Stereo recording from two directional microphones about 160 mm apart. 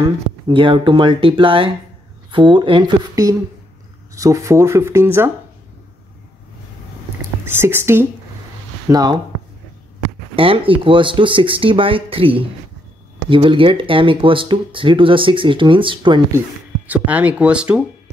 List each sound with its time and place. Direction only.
0.0 s speech: 30° right (ahead or behind)
4.1 s speech: 20° right (ahead or behind)
7.4 s speech: 15° right (ahead or behind)
8.9 s speech: 25° right (ahead or behind)
10.3 s speech: 35° right (ahead or behind)
16.3 s speech: 10° right (ahead or behind)